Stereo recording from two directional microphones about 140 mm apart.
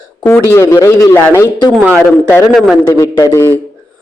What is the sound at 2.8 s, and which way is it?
Speech, 20° left (ahead or behind).